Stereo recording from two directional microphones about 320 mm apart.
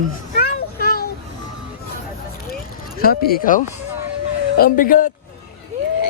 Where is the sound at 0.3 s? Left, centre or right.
Left.